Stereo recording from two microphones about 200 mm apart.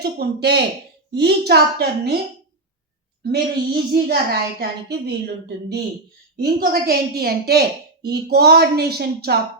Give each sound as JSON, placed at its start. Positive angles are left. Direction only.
{"t": 0.0, "sound": "a woman's voice", "side_deg": -55}
{"t": 3.3, "sound": "a woman's voice", "side_deg": -50}